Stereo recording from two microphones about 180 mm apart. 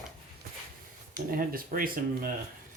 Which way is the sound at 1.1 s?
50° right (ahead or behind).